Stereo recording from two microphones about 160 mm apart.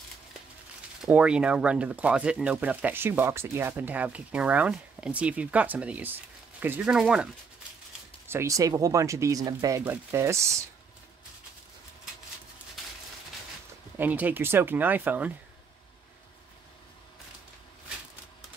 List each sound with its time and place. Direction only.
1.0 s speech: 5° right (ahead or behind)
8.3 s speech: 20° right (ahead or behind)
13.9 s speech: 10° right (ahead or behind)